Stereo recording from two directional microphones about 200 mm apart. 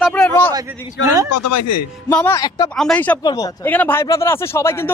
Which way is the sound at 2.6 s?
5° left (ahead or behind).